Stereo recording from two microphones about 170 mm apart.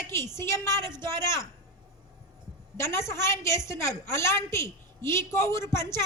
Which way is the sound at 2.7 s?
15° left (ahead or behind).